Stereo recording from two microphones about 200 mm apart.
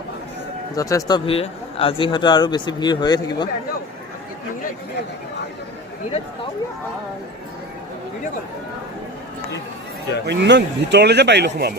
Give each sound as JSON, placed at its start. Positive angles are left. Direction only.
{"t": 0.8, "sound": "speech", "side_deg": 15}
{"t": 10.2, "sound": "speech", "side_deg": -60}